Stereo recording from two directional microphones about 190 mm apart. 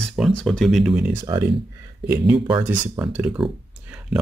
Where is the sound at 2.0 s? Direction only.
5° right (ahead or behind).